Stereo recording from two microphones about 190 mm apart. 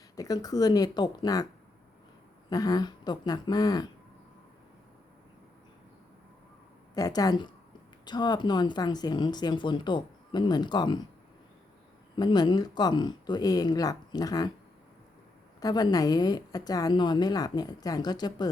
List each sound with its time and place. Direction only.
0.2 s speech: 20° left (ahead or behind)
2.5 s speech: 20° left (ahead or behind)
6.9 s speech: 20° left (ahead or behind)
12.1 s speech: 20° left (ahead or behind)
15.6 s speech: 20° left (ahead or behind)